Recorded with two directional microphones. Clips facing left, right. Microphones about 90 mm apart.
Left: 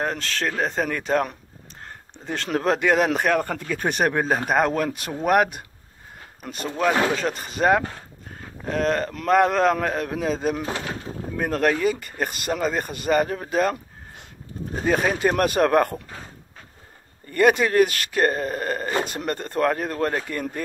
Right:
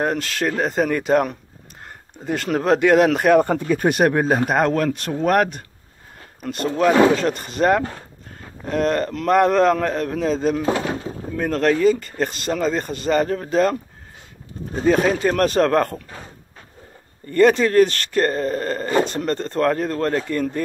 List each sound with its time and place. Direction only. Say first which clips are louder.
0.0 s a man's voice: right 4 dB; 5° right (ahead or behind)
3.3 s speech: right 8 dB; 20° right (ahead or behind)
3.7 s a man's voice: right 4 dB; 5° right (ahead or behind)
14.9 s speech: right 4 dB; 10° left (ahead or behind)
17.3 s speech: right 3 dB; 10° left (ahead or behind)